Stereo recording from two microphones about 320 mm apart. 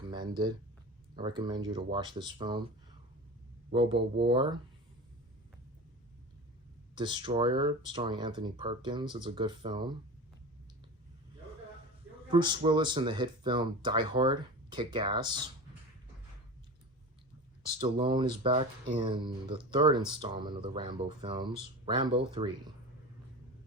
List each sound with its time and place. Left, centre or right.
0.1 s speech: centre
3.7 s speech: centre
6.9 s speech: centre
12.3 s speech: centre
17.7 s speech: centre